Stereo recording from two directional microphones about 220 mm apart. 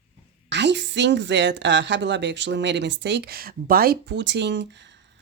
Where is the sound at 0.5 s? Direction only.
50° right (ahead or behind).